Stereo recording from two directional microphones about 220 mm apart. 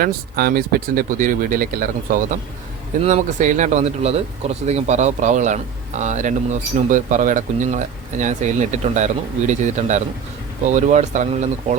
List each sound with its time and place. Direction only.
0.0 s speech: 40° right (ahead or behind)